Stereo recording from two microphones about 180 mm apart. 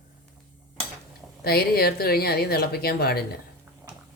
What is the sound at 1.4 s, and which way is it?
Speech, 60° left (ahead or behind).